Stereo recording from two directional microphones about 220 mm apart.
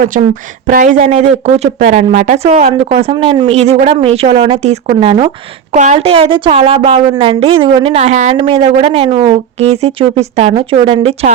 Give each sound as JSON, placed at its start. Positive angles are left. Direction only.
{"t": 0.7, "sound": "speech", "side_deg": -35}